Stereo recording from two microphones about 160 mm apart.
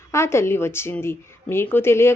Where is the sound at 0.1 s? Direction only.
15° left (ahead or behind).